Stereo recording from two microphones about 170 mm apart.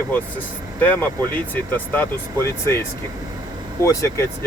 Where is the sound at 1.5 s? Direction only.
10° left (ahead or behind).